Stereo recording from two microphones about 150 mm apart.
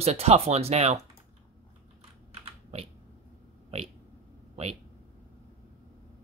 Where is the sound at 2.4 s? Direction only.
40° right (ahead or behind).